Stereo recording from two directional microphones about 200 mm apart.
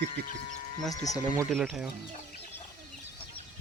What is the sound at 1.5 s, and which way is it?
Speech, 5° right (ahead or behind).